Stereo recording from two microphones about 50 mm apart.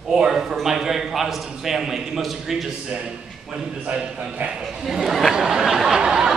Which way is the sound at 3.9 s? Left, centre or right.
Centre.